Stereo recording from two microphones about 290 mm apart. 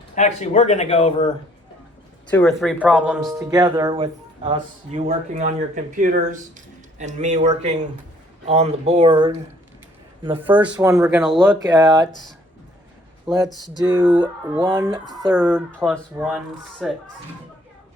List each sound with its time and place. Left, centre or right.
0.2 s speech: left
2.3 s speech: centre
3.4 s speech: centre
13.2 s speech: centre
13.5 s speech: centre
13.7 s speech: centre
14.6 s speech: centre
15.4 s speech: centre